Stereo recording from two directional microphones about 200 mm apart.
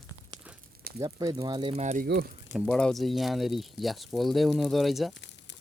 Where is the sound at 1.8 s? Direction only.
35° right (ahead or behind).